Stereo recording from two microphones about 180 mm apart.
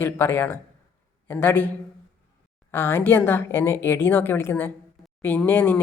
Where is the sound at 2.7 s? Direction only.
10° left (ahead or behind).